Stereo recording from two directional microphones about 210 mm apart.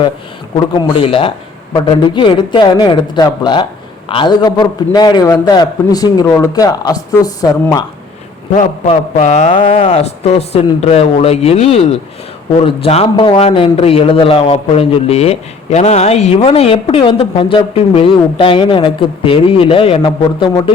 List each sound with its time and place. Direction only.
0.5 s a man's voice: 25° left (ahead or behind)
8.5 s a man's voice: 35° left (ahead or behind)